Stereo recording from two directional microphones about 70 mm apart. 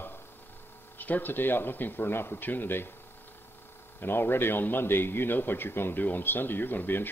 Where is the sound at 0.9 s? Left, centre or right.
Left.